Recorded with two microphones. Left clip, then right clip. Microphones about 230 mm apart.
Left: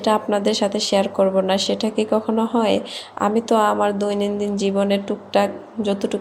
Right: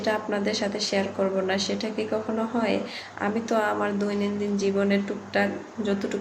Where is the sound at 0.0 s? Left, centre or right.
Left.